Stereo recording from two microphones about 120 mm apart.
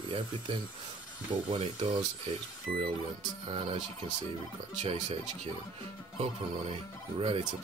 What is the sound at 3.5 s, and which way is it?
Speech, 50° right (ahead or behind).